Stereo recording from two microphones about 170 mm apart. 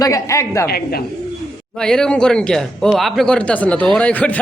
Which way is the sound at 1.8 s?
5° left (ahead or behind).